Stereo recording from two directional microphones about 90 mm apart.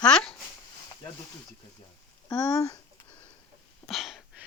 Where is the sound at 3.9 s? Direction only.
Centre (ahead or behind).